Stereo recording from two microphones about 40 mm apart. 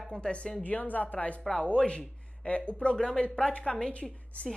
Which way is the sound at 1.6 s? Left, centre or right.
Left.